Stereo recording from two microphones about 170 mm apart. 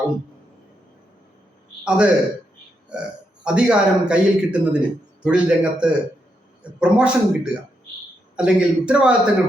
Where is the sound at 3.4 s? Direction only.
5° right (ahead or behind).